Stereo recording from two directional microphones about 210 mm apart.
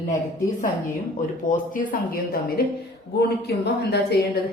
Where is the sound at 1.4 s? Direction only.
40° left (ahead or behind).